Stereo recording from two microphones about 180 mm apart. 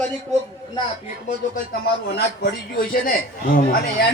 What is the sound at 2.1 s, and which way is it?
A man's voice, 55° left (ahead or behind).